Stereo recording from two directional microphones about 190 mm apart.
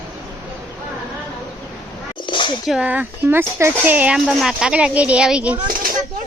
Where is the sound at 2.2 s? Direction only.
25° left (ahead or behind).